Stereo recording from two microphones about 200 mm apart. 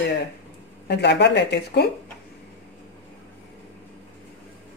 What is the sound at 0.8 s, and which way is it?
Speech, 55° left (ahead or behind).